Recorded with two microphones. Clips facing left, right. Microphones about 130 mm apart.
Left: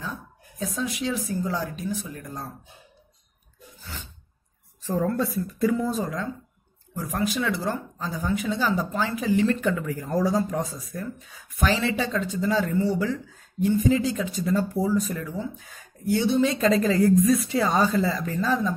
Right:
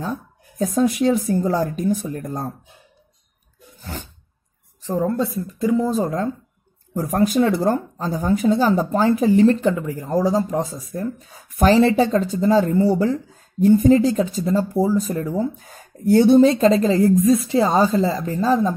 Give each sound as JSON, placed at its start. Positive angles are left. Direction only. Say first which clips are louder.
{"t": 0.0, "sound": "speech", "louder": "right 8 dB", "side_deg": -45}
{"t": 3.8, "sound": "a sound", "louder": "right 8 dB", "side_deg": -50}
{"t": 4.8, "sound": "a woman's voice", "louder": "right 4 dB", "side_deg": -20}
{"t": 11.1, "sound": "speech", "louder": "right 8 dB", "side_deg": -40}
{"t": 16.5, "sound": "a woman's voice", "louder": "right 5 dB", "side_deg": -25}